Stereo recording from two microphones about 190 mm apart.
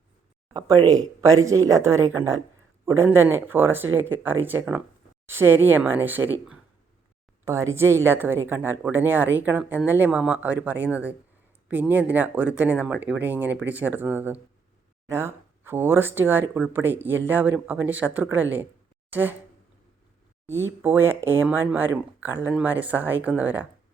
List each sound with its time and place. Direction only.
0.5 s speech: 20° right (ahead or behind)
20.5 s speech: 15° right (ahead or behind)